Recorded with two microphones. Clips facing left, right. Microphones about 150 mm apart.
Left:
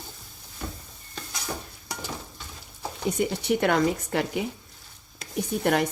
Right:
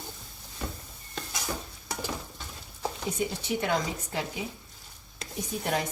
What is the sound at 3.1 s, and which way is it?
Speech, 65° left (ahead or behind).